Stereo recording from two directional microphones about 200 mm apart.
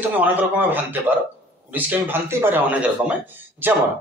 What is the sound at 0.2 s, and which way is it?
Speech, 10° right (ahead or behind).